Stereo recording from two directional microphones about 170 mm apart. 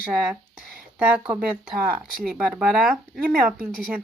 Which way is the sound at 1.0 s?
10° right (ahead or behind).